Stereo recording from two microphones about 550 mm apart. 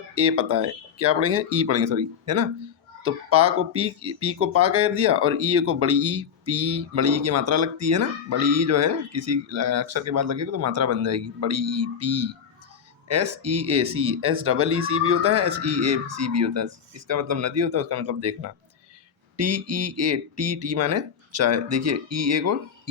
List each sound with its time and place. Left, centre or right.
0.1 s speech: right